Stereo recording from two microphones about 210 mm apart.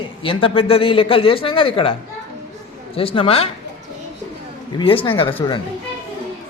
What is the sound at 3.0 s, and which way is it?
Speech, 25° left (ahead or behind).